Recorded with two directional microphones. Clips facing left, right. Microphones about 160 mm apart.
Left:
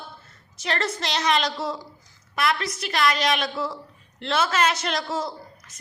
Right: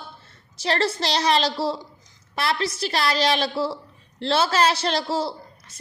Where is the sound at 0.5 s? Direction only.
30° right (ahead or behind).